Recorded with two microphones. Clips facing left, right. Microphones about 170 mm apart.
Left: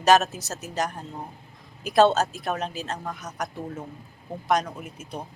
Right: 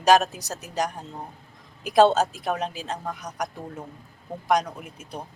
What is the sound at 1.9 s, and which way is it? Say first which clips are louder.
A woman's voice: right 1 dB; 15° right (ahead or behind).